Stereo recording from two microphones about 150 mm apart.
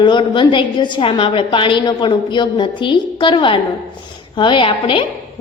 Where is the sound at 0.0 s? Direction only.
30° left (ahead or behind).